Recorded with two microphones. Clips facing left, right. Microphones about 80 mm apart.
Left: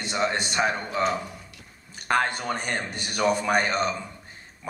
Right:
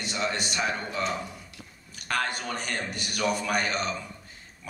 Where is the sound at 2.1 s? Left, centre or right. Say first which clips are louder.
Left 5 dB; left.